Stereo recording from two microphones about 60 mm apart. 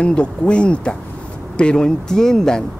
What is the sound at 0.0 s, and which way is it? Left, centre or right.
Speech, centre.